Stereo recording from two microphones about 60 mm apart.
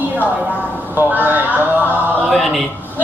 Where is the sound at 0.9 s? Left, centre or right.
Right.